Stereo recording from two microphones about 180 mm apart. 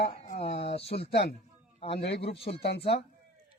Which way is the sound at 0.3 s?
35° left (ahead or behind).